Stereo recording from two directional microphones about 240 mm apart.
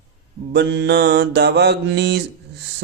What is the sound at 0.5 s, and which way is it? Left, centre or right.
Speech, right.